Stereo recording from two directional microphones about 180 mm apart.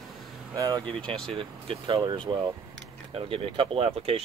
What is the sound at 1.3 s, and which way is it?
Speech, 30° right (ahead or behind).